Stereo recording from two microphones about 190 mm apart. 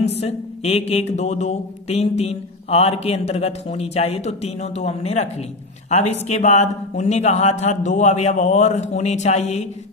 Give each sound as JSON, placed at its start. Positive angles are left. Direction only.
{"t": 0.1, "sound": "speech", "side_deg": 35}